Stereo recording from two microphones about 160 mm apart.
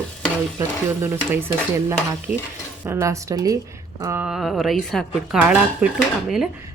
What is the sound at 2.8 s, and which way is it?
Speech, 20° right (ahead or behind).